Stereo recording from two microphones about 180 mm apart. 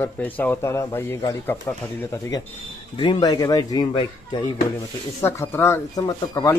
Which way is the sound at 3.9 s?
30° left (ahead or behind).